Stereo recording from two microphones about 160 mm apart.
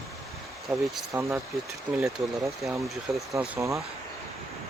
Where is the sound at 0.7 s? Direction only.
15° right (ahead or behind).